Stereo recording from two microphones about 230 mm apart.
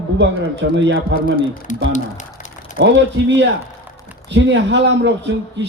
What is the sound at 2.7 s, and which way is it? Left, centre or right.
A man's voice, right.